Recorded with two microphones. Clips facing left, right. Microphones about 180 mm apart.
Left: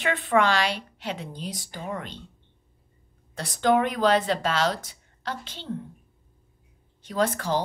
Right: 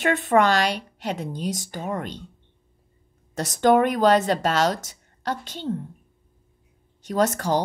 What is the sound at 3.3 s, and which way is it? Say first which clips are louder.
A woman's voice: right 4 dB; 45° right (ahead or behind).